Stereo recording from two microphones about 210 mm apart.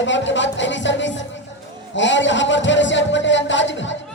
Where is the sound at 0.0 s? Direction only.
60° left (ahead or behind).